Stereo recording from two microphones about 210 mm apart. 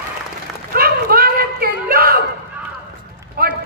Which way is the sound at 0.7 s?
45° right (ahead or behind).